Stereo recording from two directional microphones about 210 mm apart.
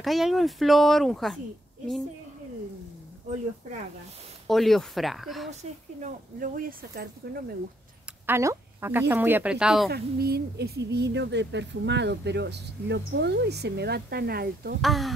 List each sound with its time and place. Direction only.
0.0 s speech: centre (ahead or behind)
4.5 s speech: centre (ahead or behind)
5.5 s speech: 35° right (ahead or behind)
8.3 s speech: 10° right (ahead or behind)
9.8 s speech: 50° right (ahead or behind)
14.8 s speech: centre (ahead or behind)